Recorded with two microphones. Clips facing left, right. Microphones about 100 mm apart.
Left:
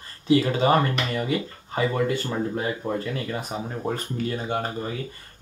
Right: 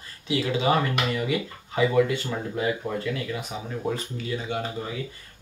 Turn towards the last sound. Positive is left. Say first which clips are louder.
# left 2 dB
turn(degrees=45)  # may be behind; listen again after turning